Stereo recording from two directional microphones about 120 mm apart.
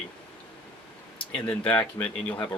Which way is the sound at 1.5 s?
10° left (ahead or behind).